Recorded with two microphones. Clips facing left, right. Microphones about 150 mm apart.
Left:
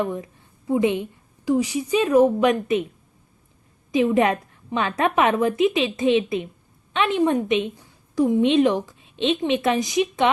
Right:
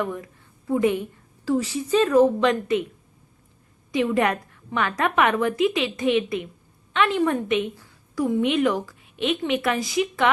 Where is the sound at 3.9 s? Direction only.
20° left (ahead or behind).